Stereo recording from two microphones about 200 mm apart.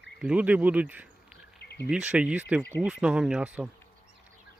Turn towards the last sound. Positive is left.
turn(degrees=-5)  # may be behind; listen again after turning